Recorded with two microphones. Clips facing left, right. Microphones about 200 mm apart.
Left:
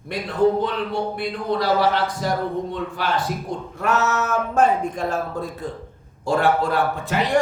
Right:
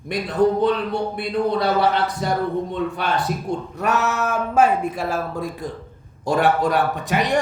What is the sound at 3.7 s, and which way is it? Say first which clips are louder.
Speech: left 1 dB; 15° right (ahead or behind).